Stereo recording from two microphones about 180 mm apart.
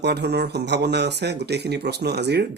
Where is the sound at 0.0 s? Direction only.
65° right (ahead or behind).